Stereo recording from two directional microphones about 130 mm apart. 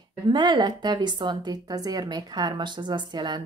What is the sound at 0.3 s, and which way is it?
A woman's voice, 35° right (ahead or behind).